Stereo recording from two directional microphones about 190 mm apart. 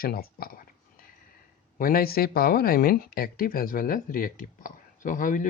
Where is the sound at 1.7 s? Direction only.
50° left (ahead or behind).